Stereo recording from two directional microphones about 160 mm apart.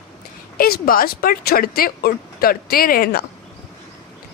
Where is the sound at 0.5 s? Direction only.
65° left (ahead or behind).